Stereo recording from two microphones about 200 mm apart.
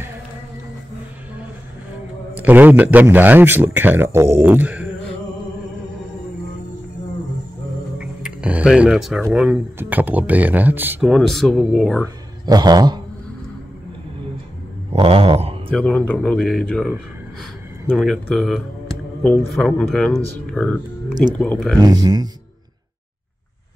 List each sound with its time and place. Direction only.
2.3 s speech: 10° right (ahead or behind)
8.0 s speech: 5° right (ahead or behind)
12.4 s speech: 20° right (ahead or behind)
14.9 s a sound: 30° right (ahead or behind)
15.7 s speech: 5° left (ahead or behind)
17.9 s speech: centre (ahead or behind)
21.7 s speech: 20° right (ahead or behind)